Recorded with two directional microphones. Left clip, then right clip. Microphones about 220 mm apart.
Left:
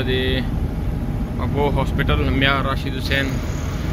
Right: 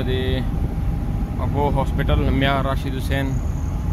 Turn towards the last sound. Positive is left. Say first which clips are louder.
# left 4 dB
turn(degrees=-25)  # may be behind; listen again after turning